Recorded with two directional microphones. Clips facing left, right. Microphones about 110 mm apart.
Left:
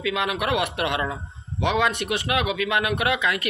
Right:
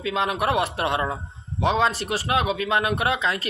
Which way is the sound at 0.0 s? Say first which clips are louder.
Right 1 dB; 30° right (ahead or behind).